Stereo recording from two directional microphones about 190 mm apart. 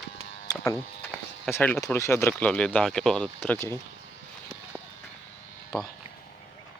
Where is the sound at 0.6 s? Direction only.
5° left (ahead or behind).